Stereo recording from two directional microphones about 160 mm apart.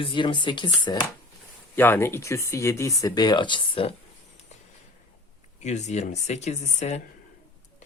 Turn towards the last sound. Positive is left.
turn(degrees=45)  # may be behind; listen again after turning